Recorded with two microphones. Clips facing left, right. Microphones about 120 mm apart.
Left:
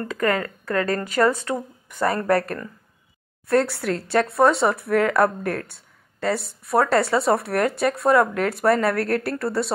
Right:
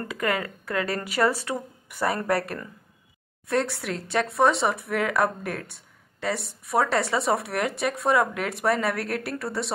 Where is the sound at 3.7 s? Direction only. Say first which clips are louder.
Left 6 dB; centre (ahead or behind).